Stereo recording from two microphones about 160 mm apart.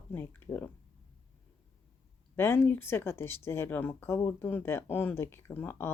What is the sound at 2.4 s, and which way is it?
A woman's voice, 15° left (ahead or behind).